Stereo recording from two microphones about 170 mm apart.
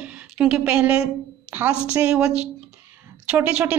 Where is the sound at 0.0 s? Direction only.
5° right (ahead or behind).